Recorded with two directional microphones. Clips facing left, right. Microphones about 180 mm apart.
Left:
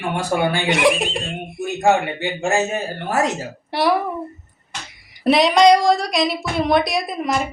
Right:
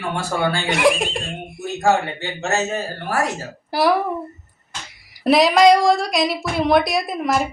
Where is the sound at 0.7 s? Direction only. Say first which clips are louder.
Right 1 dB; centre (ahead or behind).